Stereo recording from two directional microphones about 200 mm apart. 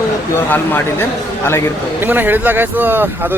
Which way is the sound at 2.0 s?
10° right (ahead or behind).